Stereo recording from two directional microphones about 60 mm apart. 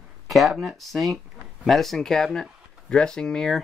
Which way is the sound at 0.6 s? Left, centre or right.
Centre.